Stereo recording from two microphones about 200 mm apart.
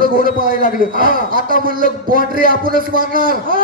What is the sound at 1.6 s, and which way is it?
A man's voice, 45° right (ahead or behind).